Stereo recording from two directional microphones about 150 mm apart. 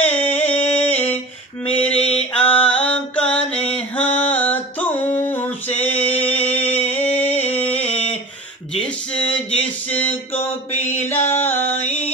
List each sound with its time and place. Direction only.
0.0 s a sound: 10° left (ahead or behind)
1.8 s mantra: 10° left (ahead or behind)
3.5 s music: 10° left (ahead or behind)
7.8 s a sound: 10° left (ahead or behind)
10.7 s mantra: 50° left (ahead or behind)
11.0 s music: 15° left (ahead or behind)